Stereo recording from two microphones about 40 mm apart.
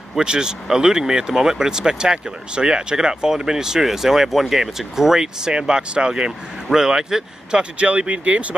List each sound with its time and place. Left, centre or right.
0.2 s speech: centre
7.8 s speech: right